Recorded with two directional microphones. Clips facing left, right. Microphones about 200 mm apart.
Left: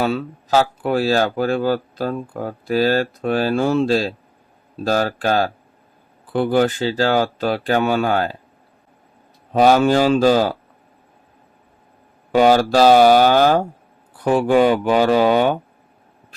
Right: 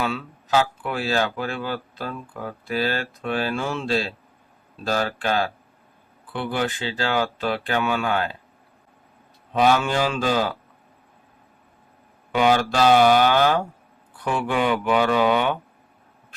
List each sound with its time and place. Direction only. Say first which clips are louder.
0.0 s speech: left 6 dB; 40° left (ahead or behind)
9.5 s speech: left 6 dB; 40° left (ahead or behind)
12.3 s speech: left 6 dB; 40° left (ahead or behind)